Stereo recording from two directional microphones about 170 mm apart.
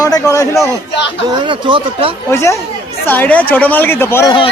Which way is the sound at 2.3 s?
15° left (ahead or behind).